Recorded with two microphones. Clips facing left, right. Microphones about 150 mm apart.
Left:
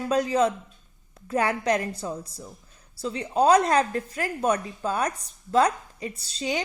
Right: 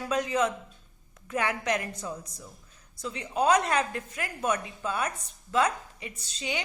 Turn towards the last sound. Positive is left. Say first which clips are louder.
# left 6 dB
turn(degrees=35)  # may be behind; listen again after turning